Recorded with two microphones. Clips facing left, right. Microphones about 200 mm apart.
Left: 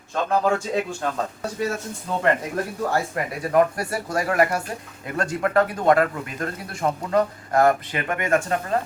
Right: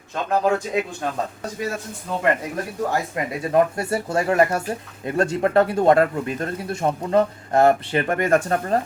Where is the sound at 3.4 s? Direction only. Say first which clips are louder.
Even; 25° right (ahead or behind).